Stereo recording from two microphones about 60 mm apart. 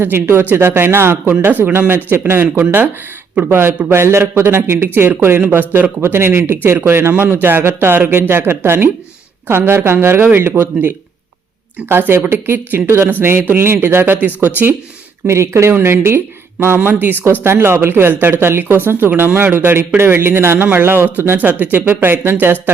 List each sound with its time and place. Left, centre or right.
0.0 s speech: right
3.5 s speech: right
6.0 s speech: right
11.9 s speech: right
15.3 s speech: right